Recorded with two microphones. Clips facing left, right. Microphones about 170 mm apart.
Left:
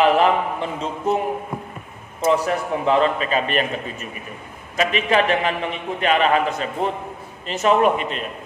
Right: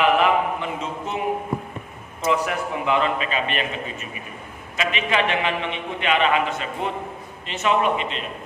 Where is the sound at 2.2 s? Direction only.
35° left (ahead or behind).